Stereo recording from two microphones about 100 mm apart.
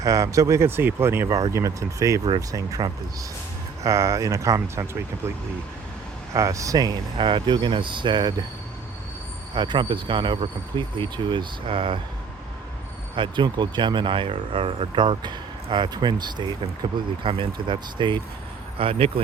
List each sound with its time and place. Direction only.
0.0 s speech: 35° right (ahead or behind)
1.3 s speech: 35° right (ahead or behind)
6.3 s speech: 30° right (ahead or behind)
7.2 s speech: 55° right (ahead or behind)
9.6 s speech: 50° right (ahead or behind)
13.1 s speech: 55° right (ahead or behind)
17.2 s speech: 60° right (ahead or behind)
18.8 s speech: 70° right (ahead or behind)